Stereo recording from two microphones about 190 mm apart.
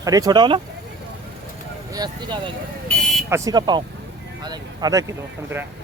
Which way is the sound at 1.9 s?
20° right (ahead or behind).